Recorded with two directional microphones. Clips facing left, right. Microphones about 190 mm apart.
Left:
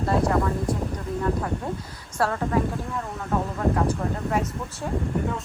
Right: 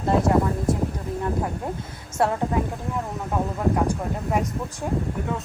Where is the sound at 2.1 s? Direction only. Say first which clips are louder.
Right 2 dB; 20° right (ahead or behind).